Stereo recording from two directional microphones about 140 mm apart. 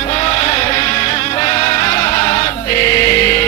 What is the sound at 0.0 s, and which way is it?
Music, 25° left (ahead or behind).